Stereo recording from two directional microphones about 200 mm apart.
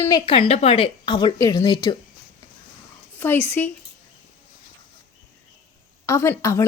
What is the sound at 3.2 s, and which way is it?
Speech, 10° left (ahead or behind).